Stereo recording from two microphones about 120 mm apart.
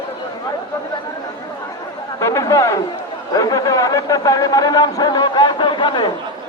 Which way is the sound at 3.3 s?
30° left (ahead or behind).